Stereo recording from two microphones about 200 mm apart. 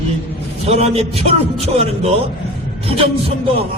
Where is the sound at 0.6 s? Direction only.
30° right (ahead or behind).